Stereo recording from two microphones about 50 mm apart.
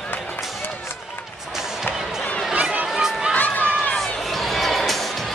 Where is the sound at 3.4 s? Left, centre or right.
Left.